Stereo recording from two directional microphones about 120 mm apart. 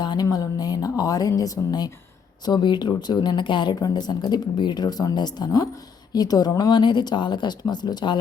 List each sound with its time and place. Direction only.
0.0 s speech: 35° left (ahead or behind)